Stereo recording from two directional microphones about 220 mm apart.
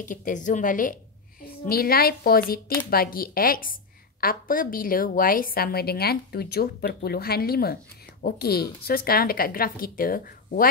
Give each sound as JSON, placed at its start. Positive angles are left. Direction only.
{"t": 0.0, "sound": "a woman's voice", "side_deg": 35}